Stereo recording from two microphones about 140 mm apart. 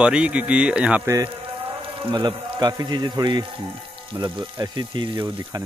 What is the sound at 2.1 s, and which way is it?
A man's voice, 30° right (ahead or behind).